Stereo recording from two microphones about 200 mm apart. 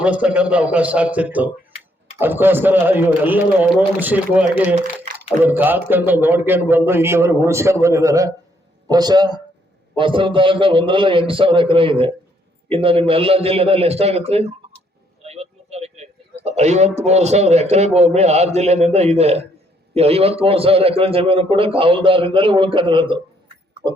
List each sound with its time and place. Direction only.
0.0 s a man's voice: 5° right (ahead or behind); by 23.1 s 25° right (ahead or behind)